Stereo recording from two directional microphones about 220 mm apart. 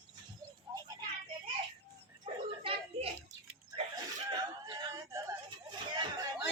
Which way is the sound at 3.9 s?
20° right (ahead or behind).